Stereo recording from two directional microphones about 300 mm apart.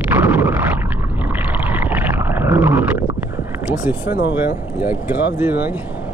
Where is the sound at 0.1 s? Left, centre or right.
Centre.